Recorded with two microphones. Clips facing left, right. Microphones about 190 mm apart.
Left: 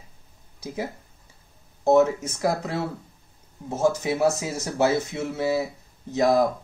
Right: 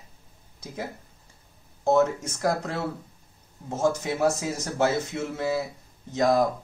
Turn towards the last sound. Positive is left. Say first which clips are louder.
# left 2 dB
turn(degrees=10)  # may be behind; listen again after turning